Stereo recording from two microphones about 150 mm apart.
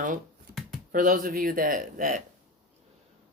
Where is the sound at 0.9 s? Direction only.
65° right (ahead or behind).